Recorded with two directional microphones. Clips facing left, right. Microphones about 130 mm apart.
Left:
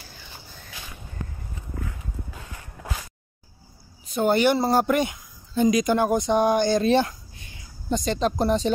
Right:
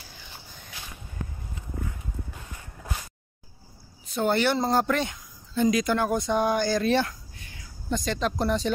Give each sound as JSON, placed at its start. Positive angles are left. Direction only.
{"t": 4.1, "sound": "speech", "side_deg": 15}